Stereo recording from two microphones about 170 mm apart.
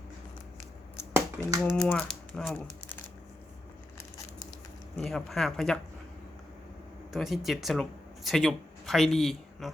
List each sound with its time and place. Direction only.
1.1 s a sound: 15° right (ahead or behind)
1.6 s speech: 5° left (ahead or behind)
4.9 s speech: centre (ahead or behind)
7.1 s speech: centre (ahead or behind)